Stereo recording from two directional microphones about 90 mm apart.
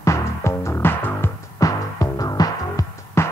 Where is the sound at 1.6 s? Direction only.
40° left (ahead or behind).